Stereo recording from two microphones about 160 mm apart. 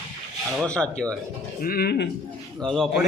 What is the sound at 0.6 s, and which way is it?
Rub, 5° left (ahead or behind).